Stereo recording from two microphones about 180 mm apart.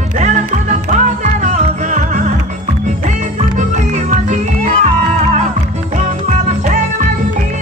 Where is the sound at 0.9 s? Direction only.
45° right (ahead or behind).